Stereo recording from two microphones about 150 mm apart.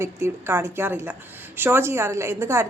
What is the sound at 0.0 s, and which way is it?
A woman's voice, 15° right (ahead or behind).